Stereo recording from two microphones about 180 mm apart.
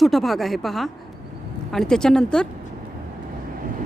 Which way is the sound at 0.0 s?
Centre (ahead or behind).